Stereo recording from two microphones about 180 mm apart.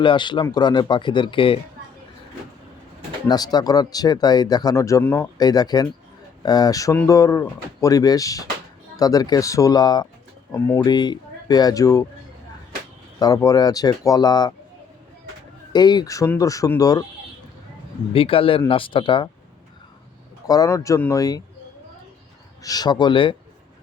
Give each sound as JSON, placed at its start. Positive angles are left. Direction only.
{"t": 0.0, "sound": "speech", "side_deg": 25}
{"t": 3.2, "sound": "speech", "side_deg": 20}
{"t": 13.1, "sound": "speech", "side_deg": 20}
{"t": 15.7, "sound": "speech", "side_deg": 25}
{"t": 18.1, "sound": "a man's voice", "side_deg": 30}
{"t": 20.5, "sound": "speech", "side_deg": 20}
{"t": 22.6, "sound": "speech", "side_deg": 20}